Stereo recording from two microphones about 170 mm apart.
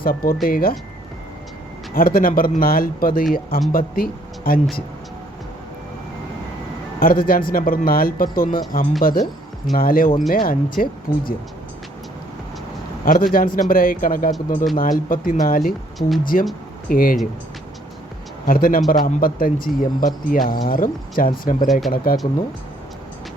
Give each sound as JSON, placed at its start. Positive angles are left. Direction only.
{"t": 0.0, "sound": "speech", "side_deg": 60}
{"t": 2.0, "sound": "speech", "side_deg": 60}
{"t": 7.0, "sound": "speech", "side_deg": 60}
{"t": 13.1, "sound": "speech", "side_deg": 55}
{"t": 16.0, "sound": "speech", "side_deg": 0}
{"t": 16.2, "sound": "speech", "side_deg": 55}
{"t": 18.4, "sound": "speech", "side_deg": 55}